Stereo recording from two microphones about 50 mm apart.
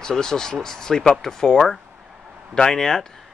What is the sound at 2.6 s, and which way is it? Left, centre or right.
Speech, centre.